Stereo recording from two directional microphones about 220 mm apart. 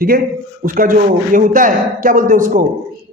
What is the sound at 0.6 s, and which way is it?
A man's voice, 40° right (ahead or behind).